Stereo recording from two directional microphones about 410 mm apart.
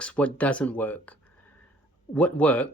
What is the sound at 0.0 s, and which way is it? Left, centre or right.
Speech, centre.